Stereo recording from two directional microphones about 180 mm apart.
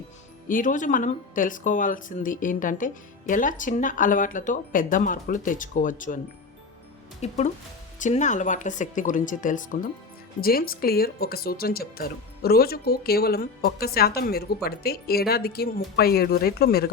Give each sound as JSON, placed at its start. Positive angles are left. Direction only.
{"t": 0.4, "sound": "speech", "side_deg": 45}
{"t": 7.2, "sound": "speech", "side_deg": 40}